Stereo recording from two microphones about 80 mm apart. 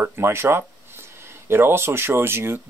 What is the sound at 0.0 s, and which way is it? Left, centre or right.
Speech, right.